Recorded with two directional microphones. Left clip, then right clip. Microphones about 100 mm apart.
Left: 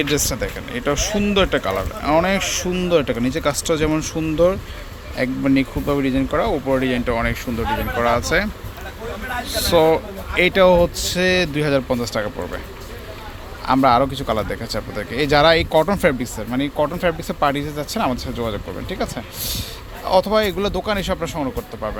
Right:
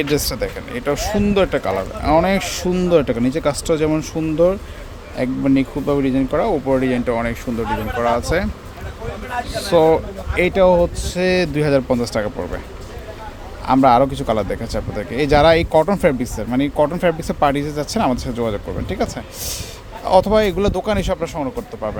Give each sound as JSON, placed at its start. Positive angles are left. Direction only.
{"t": 0.0, "sound": "speech", "side_deg": -25}
{"t": 3.0, "sound": "speech", "side_deg": -25}
{"t": 9.5, "sound": "speech", "side_deg": 0}
{"t": 9.7, "sound": "speech", "side_deg": -15}
{"t": 10.5, "sound": "speech", "side_deg": 5}
{"t": 11.2, "sound": "speech", "side_deg": -25}
{"t": 13.7, "sound": "speech", "side_deg": -30}
{"t": 16.2, "sound": "speech", "side_deg": -35}